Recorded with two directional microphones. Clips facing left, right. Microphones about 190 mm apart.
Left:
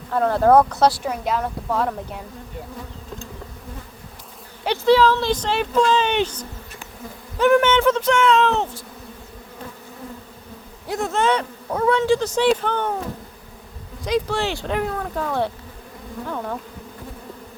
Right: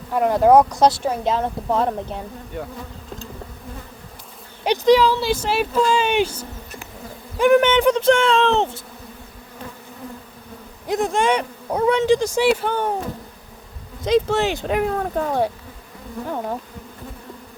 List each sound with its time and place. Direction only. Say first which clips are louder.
0.1 s speech: right 1 dB; 15° right (ahead or behind)
4.6 s speech: right 1 dB; 15° right (ahead or behind)
8.0 s speech: right 1 dB; 30° right (ahead or behind)
10.8 s speech: right 2 dB; 15° right (ahead or behind)
14.0 s speech: right 4 dB; 25° right (ahead or behind)
14.9 s speech: right 3 dB; 35° right (ahead or behind)